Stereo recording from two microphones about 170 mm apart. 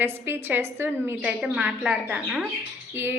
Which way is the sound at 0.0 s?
15° right (ahead or behind).